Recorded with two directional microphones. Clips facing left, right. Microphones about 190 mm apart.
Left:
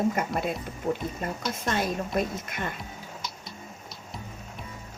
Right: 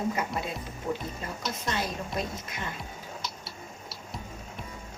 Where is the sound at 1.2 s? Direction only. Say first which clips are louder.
Left 5 dB; 55° left (ahead or behind).